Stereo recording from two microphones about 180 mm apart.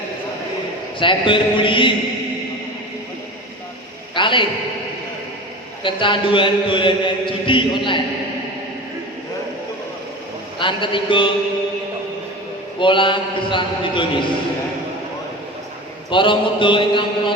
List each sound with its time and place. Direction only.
0.9 s a man's voice: 30° left (ahead or behind)
4.1 s a sound: 25° left (ahead or behind)
5.8 s a man's voice: 25° left (ahead or behind)
10.6 s a man's voice: 25° left (ahead or behind)
12.8 s a man's voice: 25° left (ahead or behind)
16.0 s a man's voice: 25° left (ahead or behind)